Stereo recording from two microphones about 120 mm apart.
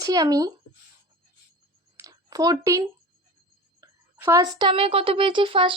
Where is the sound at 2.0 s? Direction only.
30° right (ahead or behind).